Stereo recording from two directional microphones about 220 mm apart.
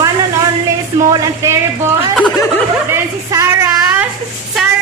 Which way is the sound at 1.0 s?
15° right (ahead or behind).